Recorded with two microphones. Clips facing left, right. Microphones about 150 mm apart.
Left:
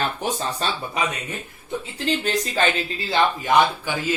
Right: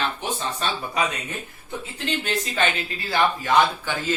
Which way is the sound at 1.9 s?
35° left (ahead or behind).